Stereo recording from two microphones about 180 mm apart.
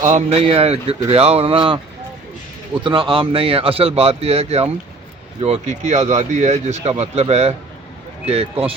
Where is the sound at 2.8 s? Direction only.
30° right (ahead or behind).